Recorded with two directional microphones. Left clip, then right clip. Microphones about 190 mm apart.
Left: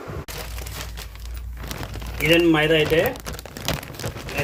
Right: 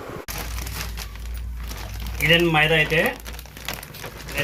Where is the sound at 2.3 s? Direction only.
55° left (ahead or behind).